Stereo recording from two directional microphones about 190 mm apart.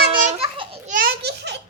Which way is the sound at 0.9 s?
55° right (ahead or behind).